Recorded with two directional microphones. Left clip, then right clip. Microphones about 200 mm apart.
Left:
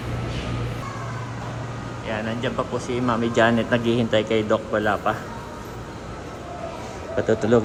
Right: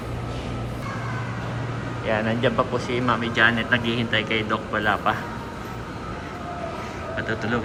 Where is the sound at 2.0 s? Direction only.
5° left (ahead or behind).